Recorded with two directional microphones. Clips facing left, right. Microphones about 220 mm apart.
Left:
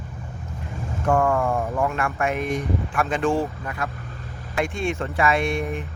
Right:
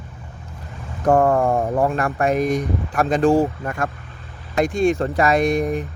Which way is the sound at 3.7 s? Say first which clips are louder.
Right 5 dB; 50° right (ahead or behind).